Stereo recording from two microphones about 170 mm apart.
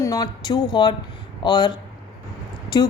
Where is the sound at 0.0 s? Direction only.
20° left (ahead or behind).